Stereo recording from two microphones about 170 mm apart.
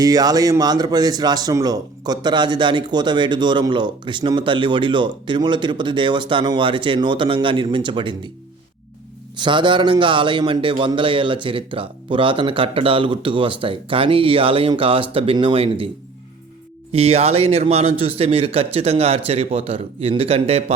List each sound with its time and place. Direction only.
0.0 s speech: 20° right (ahead or behind)
9.4 s a man's voice: 30° right (ahead or behind)
16.9 s a man's voice: 35° right (ahead or behind)